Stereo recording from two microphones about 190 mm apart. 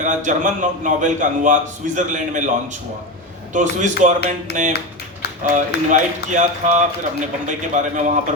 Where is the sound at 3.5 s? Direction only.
40° right (ahead or behind).